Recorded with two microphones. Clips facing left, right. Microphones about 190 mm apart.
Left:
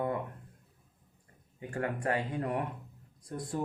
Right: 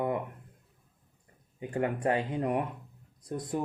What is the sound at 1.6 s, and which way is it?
Speech, 20° right (ahead or behind).